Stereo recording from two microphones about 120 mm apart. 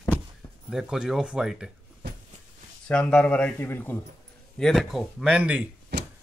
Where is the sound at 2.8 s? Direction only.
10° left (ahead or behind).